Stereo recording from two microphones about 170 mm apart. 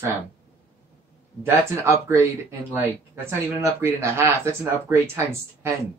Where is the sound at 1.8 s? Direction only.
15° right (ahead or behind).